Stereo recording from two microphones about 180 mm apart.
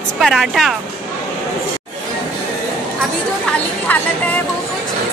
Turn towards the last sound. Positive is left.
turn(degrees=10)  # may be behind; listen again after turning